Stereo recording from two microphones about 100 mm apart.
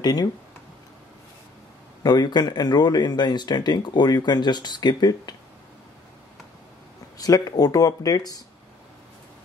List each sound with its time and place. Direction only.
0.0 s speech: 40° left (ahead or behind)
2.0 s speech: 45° left (ahead or behind)
7.2 s speech: 40° left (ahead or behind)